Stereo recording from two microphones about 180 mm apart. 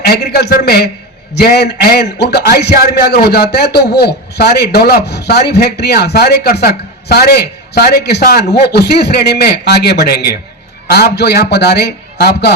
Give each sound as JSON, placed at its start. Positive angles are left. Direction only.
{"t": 0.0, "sound": "a man's voice", "side_deg": 65}